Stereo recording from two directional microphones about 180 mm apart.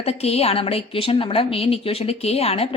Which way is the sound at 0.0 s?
35° left (ahead or behind).